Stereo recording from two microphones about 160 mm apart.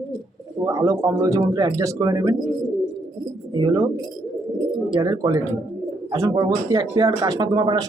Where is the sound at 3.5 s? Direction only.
25° right (ahead or behind).